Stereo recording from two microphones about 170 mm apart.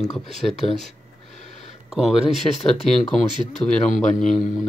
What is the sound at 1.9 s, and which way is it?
Speech, 5° right (ahead or behind).